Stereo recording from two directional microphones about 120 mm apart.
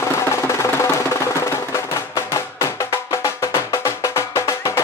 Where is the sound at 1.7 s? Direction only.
25° left (ahead or behind).